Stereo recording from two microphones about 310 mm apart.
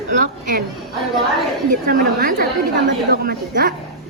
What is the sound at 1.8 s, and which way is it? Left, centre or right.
A woman's voice, right.